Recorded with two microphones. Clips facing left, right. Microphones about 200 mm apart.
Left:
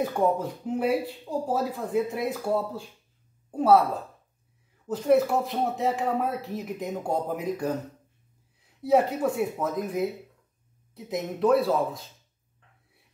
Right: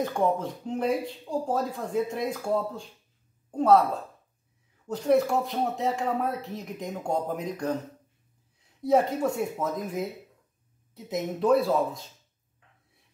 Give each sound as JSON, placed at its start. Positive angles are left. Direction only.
{"t": 0.0, "sound": "speech", "side_deg": 5}
{"t": 4.8, "sound": "speech", "side_deg": 0}
{"t": 8.8, "sound": "speech", "side_deg": 0}